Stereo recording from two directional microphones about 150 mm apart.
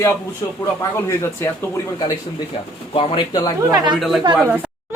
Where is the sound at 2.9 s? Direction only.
35° left (ahead or behind).